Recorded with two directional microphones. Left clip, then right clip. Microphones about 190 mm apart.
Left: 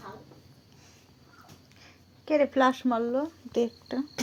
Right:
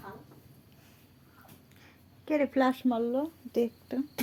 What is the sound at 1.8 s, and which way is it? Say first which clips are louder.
Speech: left 3 dB; 25° right (ahead or behind).